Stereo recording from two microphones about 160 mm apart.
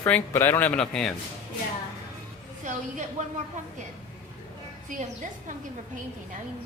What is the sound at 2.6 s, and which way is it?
Speech, 50° right (ahead or behind).